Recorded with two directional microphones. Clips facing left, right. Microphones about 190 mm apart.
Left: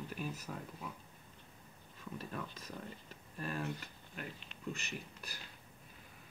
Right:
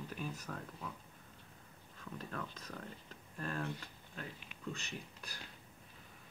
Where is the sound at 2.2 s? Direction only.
10° left (ahead or behind).